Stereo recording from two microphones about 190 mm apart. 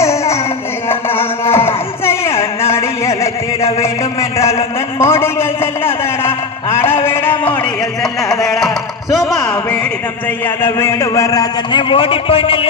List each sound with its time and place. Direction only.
0.0 s music: 15° left (ahead or behind)
1.1 s music: 30° left (ahead or behind)
1.6 s music: 15° left (ahead or behind)
3.8 s a man's voice: 15° left (ahead or behind)
7.0 s a sound: 10° left (ahead or behind)
10.4 s a man's voice: 10° left (ahead or behind); by 12.6 s 30° left (ahead or behind)